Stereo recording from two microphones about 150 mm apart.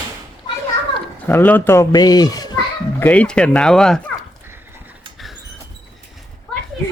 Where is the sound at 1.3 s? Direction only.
15° left (ahead or behind).